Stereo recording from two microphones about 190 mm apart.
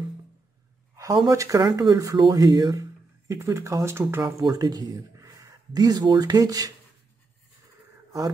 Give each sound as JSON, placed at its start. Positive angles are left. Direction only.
{"t": 0.9, "sound": "speech", "side_deg": -15}